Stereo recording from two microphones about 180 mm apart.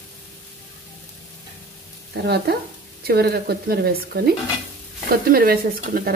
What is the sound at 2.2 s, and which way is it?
Speech, 65° right (ahead or behind).